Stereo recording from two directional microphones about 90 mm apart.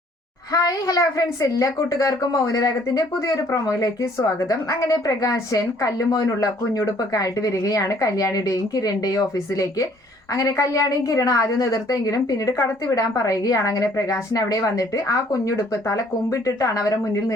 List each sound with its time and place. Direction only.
0.5 s a woman's voice: 40° left (ahead or behind)